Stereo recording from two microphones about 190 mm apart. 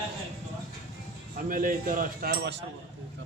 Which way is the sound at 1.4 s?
45° right (ahead or behind).